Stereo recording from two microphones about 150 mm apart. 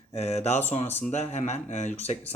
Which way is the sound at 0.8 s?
15° left (ahead or behind).